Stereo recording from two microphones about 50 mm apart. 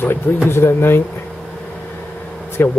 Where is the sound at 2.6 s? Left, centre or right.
Left.